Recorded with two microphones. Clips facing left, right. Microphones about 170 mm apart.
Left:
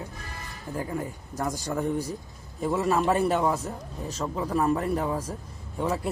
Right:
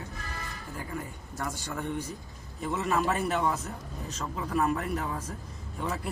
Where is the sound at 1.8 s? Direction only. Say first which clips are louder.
Left 5 dB; 35° left (ahead or behind).